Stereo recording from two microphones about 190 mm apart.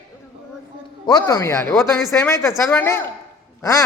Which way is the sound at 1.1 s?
20° left (ahead or behind).